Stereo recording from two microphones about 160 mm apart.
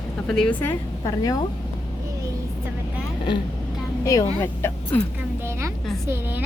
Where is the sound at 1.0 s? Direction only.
20° left (ahead or behind).